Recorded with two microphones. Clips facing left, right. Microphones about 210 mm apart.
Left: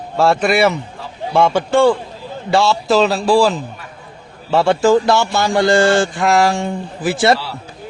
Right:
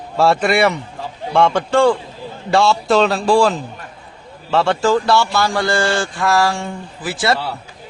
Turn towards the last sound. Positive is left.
turn(degrees=25)  # may be behind; listen again after turning